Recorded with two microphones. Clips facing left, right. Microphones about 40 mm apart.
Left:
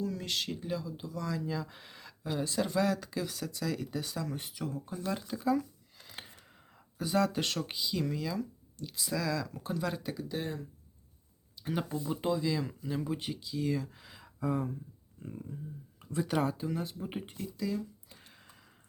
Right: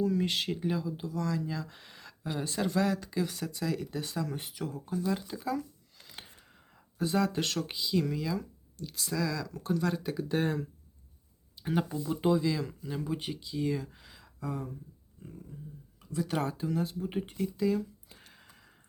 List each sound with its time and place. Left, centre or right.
0.0 s speech: centre
1.0 s speech: centre
5.1 s a sound: centre
7.0 s speech: centre
10.0 s speech: centre
11.6 s speech: centre
12.6 s speech: centre
16.0 s a sound: left
16.2 s speech: centre
17.3 s speech: centre
18.2 s a sound: centre